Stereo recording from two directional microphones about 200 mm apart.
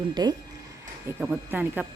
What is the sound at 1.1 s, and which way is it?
Speech, 10° right (ahead or behind).